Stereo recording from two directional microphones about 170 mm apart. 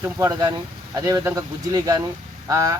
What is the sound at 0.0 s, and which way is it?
A man's voice, 20° right (ahead or behind).